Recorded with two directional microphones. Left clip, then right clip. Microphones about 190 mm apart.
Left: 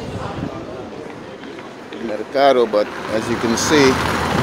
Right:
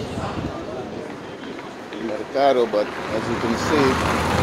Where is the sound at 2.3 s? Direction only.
40° left (ahead or behind).